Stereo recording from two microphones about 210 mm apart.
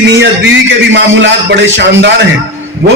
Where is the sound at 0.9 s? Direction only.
60° right (ahead or behind).